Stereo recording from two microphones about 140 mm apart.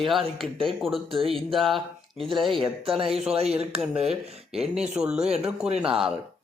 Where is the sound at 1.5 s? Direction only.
Centre (ahead or behind).